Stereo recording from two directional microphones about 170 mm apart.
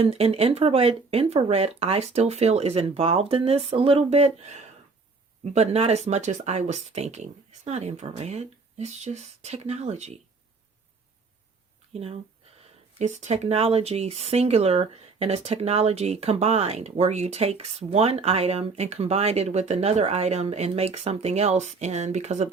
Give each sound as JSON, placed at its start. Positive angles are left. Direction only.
{"t": 0.0, "sound": "speech", "side_deg": -35}
{"t": 11.9, "sound": "speech", "side_deg": -35}